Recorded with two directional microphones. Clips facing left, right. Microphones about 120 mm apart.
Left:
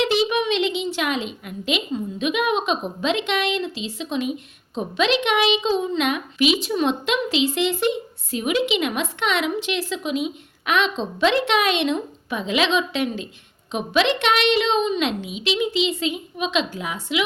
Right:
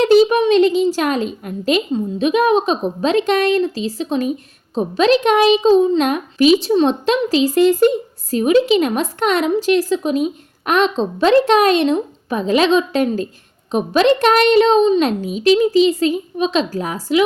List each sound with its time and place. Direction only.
0.0 s a woman's voice: 40° right (ahead or behind)